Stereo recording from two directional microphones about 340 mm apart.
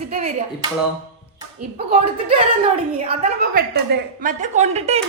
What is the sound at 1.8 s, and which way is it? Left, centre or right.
A woman's voice, centre.